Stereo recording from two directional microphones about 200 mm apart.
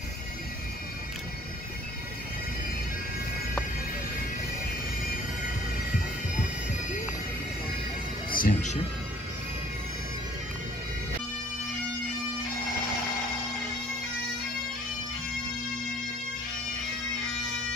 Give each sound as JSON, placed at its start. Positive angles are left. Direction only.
{"t": 8.3, "sound": "music", "side_deg": 45}